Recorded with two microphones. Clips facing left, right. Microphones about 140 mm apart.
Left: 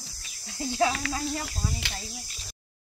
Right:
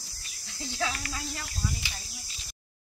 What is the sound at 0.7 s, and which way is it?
Speech, 35° left (ahead or behind).